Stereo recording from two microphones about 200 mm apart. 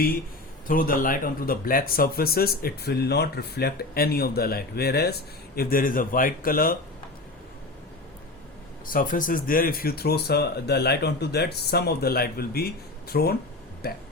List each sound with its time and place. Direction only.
0.7 s speech: 45° left (ahead or behind)
8.9 s speech: 40° left (ahead or behind)